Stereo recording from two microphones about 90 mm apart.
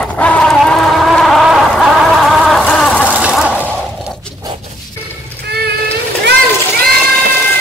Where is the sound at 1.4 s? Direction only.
5° right (ahead or behind).